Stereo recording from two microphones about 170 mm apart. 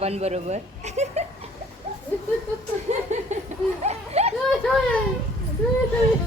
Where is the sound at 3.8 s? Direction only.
40° right (ahead or behind).